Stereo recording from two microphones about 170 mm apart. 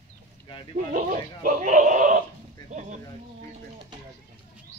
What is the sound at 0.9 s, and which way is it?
Speech, 50° right (ahead or behind).